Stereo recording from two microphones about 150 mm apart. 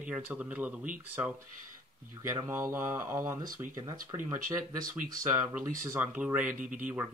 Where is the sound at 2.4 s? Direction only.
15° right (ahead or behind).